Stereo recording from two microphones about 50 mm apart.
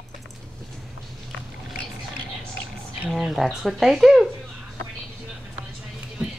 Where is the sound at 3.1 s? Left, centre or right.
Centre.